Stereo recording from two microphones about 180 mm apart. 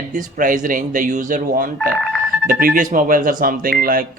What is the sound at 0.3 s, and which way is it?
Speech, 45° right (ahead or behind).